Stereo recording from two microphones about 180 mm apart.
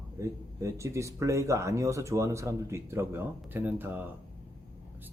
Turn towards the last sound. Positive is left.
turn(degrees=-10)  # may be behind; listen again after turning